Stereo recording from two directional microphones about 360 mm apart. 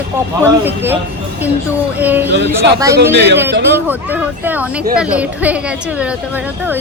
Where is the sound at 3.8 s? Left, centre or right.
Centre.